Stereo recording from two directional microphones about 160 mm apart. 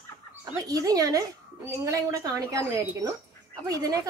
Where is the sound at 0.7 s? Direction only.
25° right (ahead or behind).